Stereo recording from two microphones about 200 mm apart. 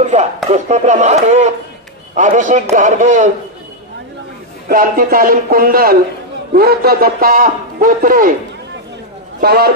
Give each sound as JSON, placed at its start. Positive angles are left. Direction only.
{"t": 0.0, "sound": "speech", "side_deg": -35}
{"t": 4.6, "sound": "a man's voice", "side_deg": -45}
{"t": 9.4, "sound": "a man's voice", "side_deg": -50}